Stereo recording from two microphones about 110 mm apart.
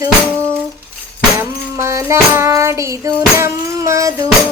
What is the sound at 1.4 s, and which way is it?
Child singing, 25° right (ahead or behind).